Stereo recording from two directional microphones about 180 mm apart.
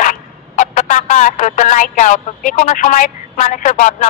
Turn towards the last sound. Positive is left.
turn(degrees=45)  # may be behind; listen again after turning